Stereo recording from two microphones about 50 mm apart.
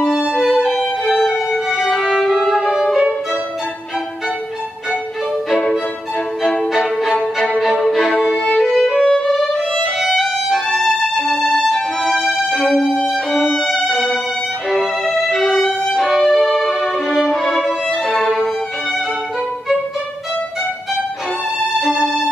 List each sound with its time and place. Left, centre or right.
0.0 s violin: centre
6.4 s music: centre
7.8 s violin: centre
8.5 s music: centre
9.9 s violin: centre
10.7 s violin: centre
11.3 s music: centre
13.0 s violin: centre
13.8 s music: centre
14.7 s violin: centre
16.2 s music: centre